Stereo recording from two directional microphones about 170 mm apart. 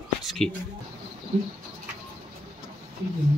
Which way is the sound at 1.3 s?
40° right (ahead or behind).